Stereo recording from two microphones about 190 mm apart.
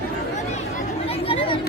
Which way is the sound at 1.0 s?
30° left (ahead or behind).